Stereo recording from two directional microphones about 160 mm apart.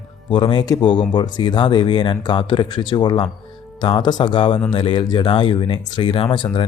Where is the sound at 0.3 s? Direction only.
30° left (ahead or behind).